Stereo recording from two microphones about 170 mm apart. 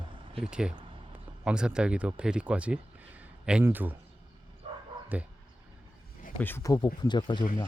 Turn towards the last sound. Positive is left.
turn(degrees=25)  # may be behind; listen again after turning